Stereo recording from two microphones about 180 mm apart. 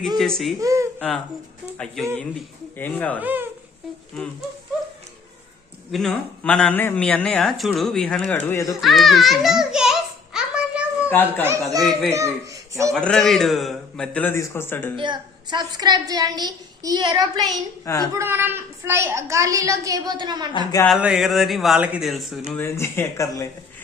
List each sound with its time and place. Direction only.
0.2 s speech: centre (ahead or behind)
0.6 s speech: 15° right (ahead or behind)
0.9 s speech: 5° left (ahead or behind)
2.7 s speech: 10° left (ahead or behind)
3.2 s speech: 10° right (ahead or behind)
4.1 s speech: 5° left (ahead or behind)
5.9 s speech: 5° left (ahead or behind)
8.7 s a sound: centre (ahead or behind)
11.1 s speech: 10° left (ahead or behind)
11.4 s a child's voice: 15° right (ahead or behind)
12.9 s speech: 5° left (ahead or behind)
14.9 s a woman's voice: 25° right (ahead or behind)
20.8 s speech: centre (ahead or behind)
22.5 s speech: 15° left (ahead or behind)